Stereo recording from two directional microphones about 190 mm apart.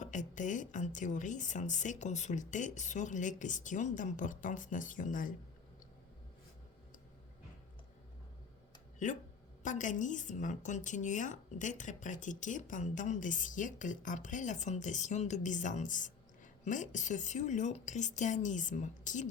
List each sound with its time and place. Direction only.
0.0 s a woman's voice: 40° left (ahead or behind)
9.0 s a woman's voice: 40° left (ahead or behind)